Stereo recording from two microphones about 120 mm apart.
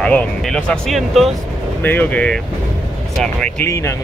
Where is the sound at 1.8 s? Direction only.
15° left (ahead or behind).